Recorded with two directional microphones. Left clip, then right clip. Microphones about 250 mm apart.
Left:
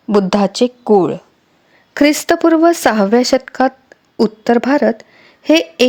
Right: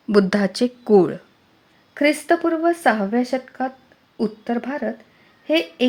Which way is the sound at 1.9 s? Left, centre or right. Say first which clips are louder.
Left 5 dB; left.